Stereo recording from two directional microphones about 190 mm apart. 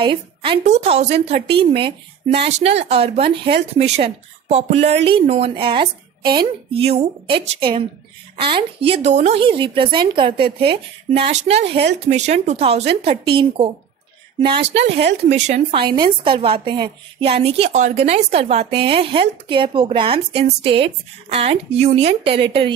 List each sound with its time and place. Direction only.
0.0 s speech: 25° right (ahead or behind)
8.4 s speech: 25° right (ahead or behind)